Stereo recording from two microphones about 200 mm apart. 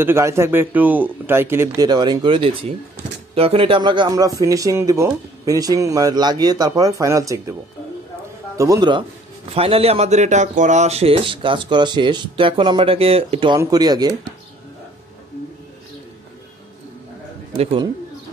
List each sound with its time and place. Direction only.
0.0 s speech: 15° right (ahead or behind)
8.5 s speech: 15° right (ahead or behind)
17.6 s speech: 30° right (ahead or behind)